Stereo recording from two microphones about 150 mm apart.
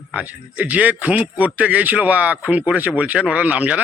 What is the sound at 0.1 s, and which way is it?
A man's voice, 10° right (ahead or behind).